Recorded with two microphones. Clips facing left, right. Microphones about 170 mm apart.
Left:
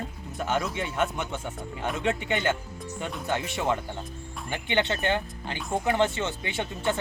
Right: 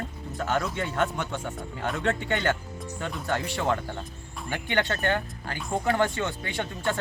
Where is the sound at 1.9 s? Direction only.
15° left (ahead or behind).